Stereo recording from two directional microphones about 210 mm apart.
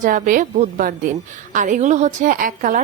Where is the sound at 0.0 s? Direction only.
40° right (ahead or behind).